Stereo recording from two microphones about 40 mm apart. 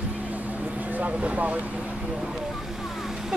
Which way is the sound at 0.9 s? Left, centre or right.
Right.